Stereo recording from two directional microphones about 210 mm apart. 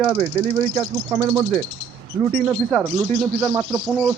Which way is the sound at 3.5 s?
20° right (ahead or behind).